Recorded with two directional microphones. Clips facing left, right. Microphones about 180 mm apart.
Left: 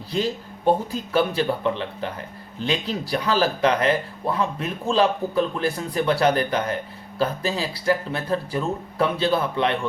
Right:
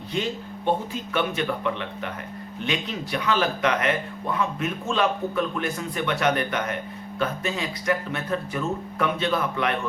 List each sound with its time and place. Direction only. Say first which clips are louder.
0.1 s speech: left 3 dB; 35° left (ahead or behind)